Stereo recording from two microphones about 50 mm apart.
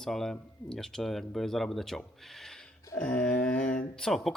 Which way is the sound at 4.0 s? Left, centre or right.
Centre.